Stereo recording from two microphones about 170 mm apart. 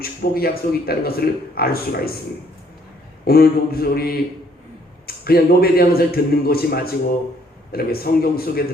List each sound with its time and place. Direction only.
0.0 s a man's voice: 60° left (ahead or behind)
3.2 s a man's voice: 65° left (ahead or behind)